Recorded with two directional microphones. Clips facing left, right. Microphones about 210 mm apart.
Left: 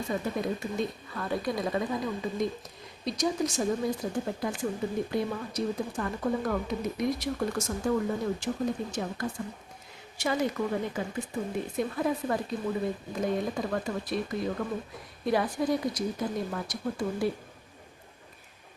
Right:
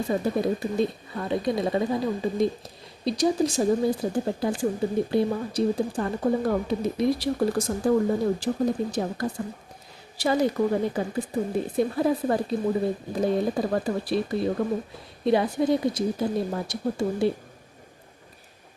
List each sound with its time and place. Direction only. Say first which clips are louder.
0.1 s speech: right 6 dB; 35° right (ahead or behind)